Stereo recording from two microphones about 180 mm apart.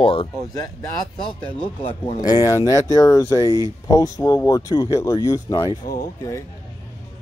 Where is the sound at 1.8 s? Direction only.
35° left (ahead or behind).